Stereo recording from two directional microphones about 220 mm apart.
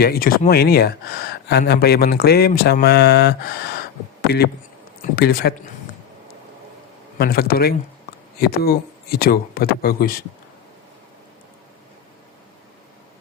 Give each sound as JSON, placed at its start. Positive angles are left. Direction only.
{"t": 0.0, "sound": "speech", "side_deg": 40}
{"t": 7.2, "sound": "speech", "side_deg": 45}